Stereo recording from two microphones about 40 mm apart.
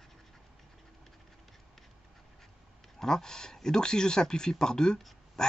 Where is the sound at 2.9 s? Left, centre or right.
Centre.